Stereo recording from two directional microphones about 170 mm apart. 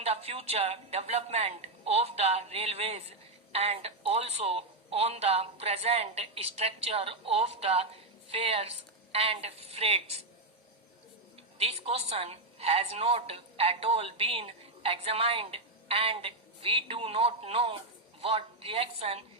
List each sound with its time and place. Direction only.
0.0 s a woman's voice: 35° right (ahead or behind)
11.5 s a woman's voice: 35° right (ahead or behind)